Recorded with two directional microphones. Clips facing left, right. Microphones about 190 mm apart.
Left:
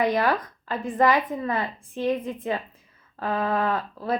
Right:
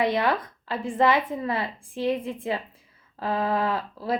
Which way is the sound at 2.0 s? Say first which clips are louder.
Left 1 dB; 25° right (ahead or behind).